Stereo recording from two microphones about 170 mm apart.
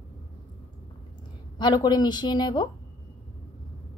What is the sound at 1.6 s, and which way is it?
A woman's voice, 25° left (ahead or behind).